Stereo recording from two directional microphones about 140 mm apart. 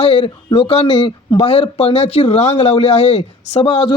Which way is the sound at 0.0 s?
50° left (ahead or behind).